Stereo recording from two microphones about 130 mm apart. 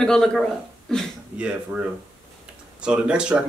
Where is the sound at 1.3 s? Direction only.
10° right (ahead or behind).